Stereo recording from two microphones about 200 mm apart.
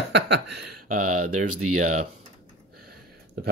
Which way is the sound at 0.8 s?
40° right (ahead or behind).